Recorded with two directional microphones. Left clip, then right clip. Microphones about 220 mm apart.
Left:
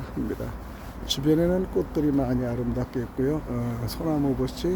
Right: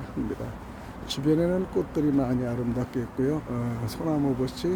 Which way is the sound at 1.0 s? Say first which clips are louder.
Left 2 dB; 10° left (ahead or behind).